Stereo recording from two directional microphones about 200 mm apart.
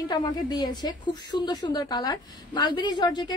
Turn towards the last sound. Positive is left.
turn(degrees=20)  # may be behind; listen again after turning